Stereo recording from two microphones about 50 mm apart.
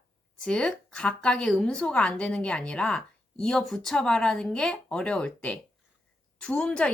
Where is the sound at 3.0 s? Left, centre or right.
Centre.